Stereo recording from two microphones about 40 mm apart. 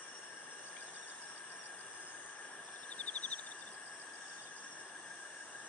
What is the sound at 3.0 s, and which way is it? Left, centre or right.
Cricket, left.